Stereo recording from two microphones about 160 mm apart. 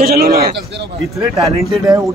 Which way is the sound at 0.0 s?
70° right (ahead or behind).